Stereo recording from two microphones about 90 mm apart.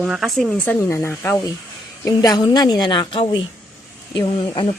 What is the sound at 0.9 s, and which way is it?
Speech, 25° left (ahead or behind).